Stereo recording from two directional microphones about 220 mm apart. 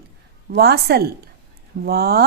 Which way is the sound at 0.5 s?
45° right (ahead or behind).